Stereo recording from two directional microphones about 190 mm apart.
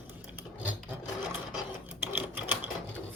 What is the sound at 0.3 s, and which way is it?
Sewing machine, 10° right (ahead or behind).